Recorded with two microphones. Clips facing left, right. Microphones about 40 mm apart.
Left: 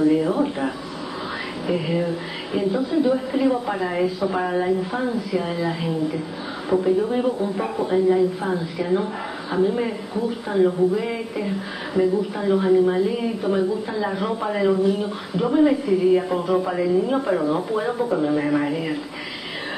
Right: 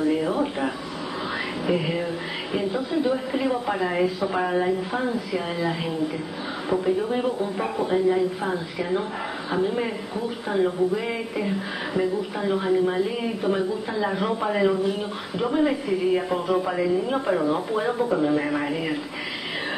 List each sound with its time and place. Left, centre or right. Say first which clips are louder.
0.0 s speech: left 4 dB; centre
1.7 s speech: left 3 dB; right
13.0 s speech: left 2 dB; right
18.7 s speech: left 2 dB; right